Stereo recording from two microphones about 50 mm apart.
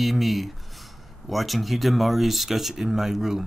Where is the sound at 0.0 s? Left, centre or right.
Centre.